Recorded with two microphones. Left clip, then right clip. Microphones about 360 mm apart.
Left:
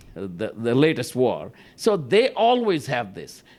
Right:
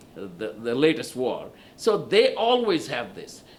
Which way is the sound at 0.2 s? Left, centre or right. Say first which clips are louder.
Left 4 dB; left.